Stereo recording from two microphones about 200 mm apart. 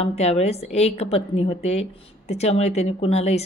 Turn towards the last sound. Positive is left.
turn(degrees=30)  # may be behind; listen again after turning